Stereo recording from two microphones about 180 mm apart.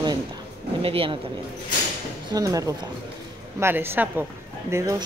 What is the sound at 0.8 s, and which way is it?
Speech, 30° right (ahead or behind).